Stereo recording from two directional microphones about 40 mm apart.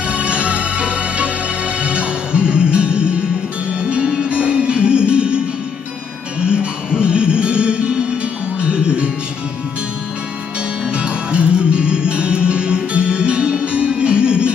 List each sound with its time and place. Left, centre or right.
0.1 s music: right
6.4 s music: right
10.9 s music: right